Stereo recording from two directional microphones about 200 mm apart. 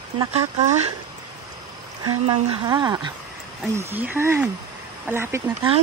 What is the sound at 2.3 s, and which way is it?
Speech, 25° right (ahead or behind).